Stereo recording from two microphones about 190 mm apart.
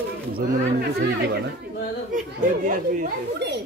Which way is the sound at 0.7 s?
60° right (ahead or behind).